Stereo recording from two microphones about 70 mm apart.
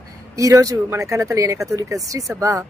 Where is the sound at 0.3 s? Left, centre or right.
Right.